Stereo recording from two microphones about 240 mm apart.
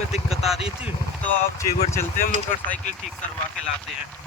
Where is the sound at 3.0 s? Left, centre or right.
Centre.